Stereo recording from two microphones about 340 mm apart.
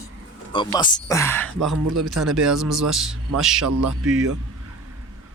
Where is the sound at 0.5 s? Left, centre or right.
Centre.